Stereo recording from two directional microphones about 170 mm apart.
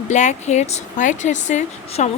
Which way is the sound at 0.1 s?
45° left (ahead or behind).